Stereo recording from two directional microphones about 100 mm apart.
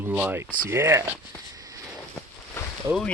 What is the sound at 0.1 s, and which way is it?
Speech, 20° right (ahead or behind).